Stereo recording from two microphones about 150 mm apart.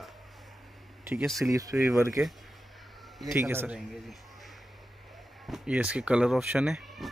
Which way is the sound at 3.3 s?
15° right (ahead or behind).